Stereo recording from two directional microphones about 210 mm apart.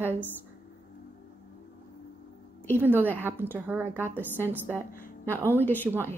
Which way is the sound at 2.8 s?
10° right (ahead or behind).